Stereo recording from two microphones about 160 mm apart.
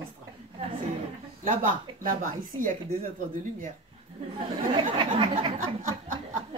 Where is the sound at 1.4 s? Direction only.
55° right (ahead or behind).